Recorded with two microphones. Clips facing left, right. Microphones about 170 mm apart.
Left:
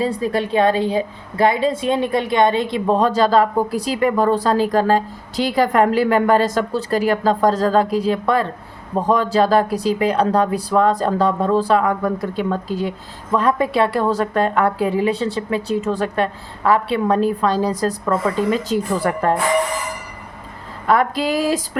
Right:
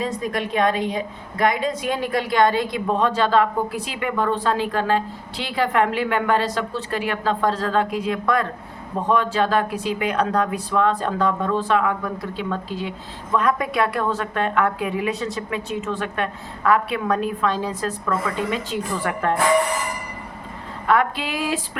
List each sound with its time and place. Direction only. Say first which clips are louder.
0.0 s a woman's voice: left 5 dB; 30° left (ahead or behind)
20.8 s a woman's voice: left 3 dB; 35° left (ahead or behind)